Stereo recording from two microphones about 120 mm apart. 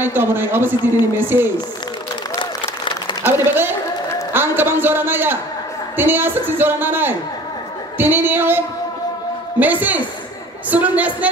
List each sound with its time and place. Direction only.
0.0 s speech: 20° right (ahead or behind)
2.3 s applause: 40° left (ahead or behind)
4.3 s a sound: 20° right (ahead or behind)
5.9 s speech: 15° right (ahead or behind)